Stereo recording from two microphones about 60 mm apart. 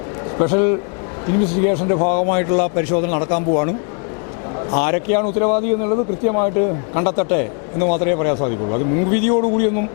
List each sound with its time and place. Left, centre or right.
0.3 s a man's voice: left
5.5 s a man's voice: left
6.6 s a man's voice: left
8.1 s a man's voice: left